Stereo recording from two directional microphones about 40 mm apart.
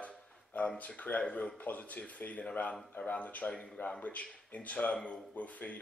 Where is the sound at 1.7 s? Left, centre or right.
Left.